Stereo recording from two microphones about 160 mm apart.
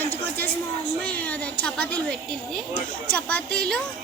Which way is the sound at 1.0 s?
10° left (ahead or behind).